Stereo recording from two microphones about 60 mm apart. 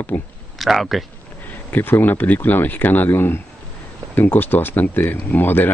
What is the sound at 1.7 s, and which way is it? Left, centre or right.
Speech, left.